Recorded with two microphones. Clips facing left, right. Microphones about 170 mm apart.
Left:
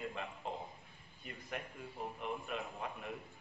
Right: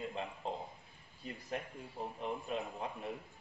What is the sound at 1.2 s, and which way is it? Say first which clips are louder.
A man's voice: right 3 dB; 30° right (ahead or behind).